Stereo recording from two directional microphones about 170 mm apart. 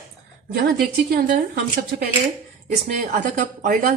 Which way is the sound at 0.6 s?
65° right (ahead or behind).